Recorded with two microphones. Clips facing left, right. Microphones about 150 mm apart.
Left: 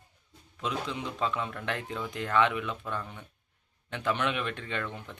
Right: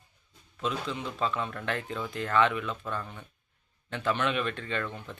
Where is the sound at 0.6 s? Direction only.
15° left (ahead or behind).